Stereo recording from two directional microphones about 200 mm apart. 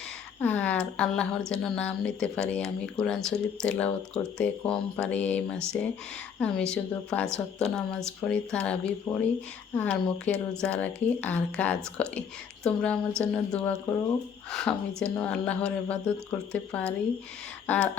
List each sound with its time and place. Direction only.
0.3 s speech: 10° left (ahead or behind)